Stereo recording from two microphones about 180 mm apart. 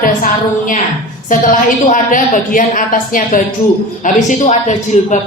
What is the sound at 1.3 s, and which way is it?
A woman's voice, 45° left (ahead or behind).